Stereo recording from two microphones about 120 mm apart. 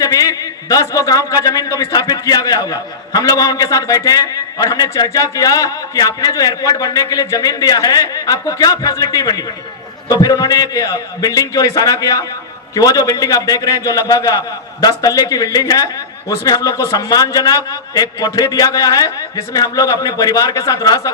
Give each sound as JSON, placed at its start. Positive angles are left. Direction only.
{"t": 0.0, "sound": "a man's voice", "side_deg": 30}